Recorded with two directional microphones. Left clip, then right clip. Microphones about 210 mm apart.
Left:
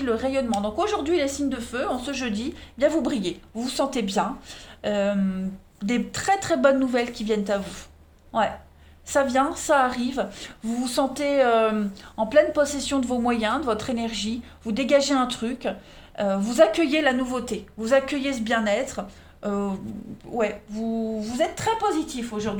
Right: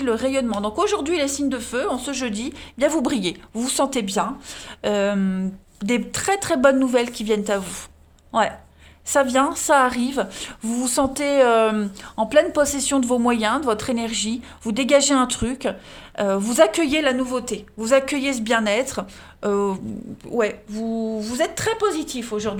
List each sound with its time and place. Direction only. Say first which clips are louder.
0.0 s speech: right 3 dB; 35° right (ahead or behind)
4.8 s speech: right 3 dB; 45° right (ahead or behind)
5.8 s speech: right 3 dB; 35° right (ahead or behind); by 22.5 s 55° right (ahead or behind)